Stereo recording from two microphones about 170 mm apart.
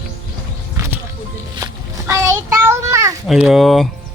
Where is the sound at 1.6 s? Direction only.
15° right (ahead or behind).